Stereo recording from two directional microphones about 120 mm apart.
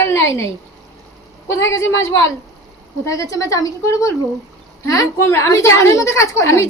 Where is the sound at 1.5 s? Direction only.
25° left (ahead or behind).